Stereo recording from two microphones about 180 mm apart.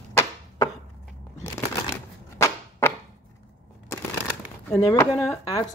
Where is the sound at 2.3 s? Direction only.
15° left (ahead or behind).